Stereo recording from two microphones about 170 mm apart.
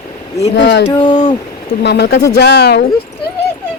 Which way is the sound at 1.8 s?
80° left.